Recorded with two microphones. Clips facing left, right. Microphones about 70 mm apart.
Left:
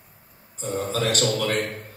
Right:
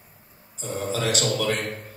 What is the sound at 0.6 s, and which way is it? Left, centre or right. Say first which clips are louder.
A man's voice: left 2 dB; left.